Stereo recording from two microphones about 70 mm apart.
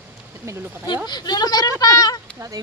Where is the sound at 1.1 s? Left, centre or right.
Left.